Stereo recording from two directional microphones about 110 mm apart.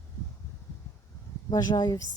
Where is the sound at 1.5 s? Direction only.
40° left (ahead or behind).